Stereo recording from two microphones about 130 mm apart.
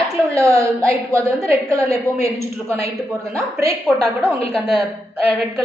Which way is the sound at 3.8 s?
5° right (ahead or behind).